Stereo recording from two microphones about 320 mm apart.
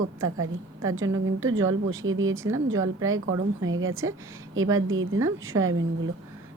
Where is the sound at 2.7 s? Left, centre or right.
Centre.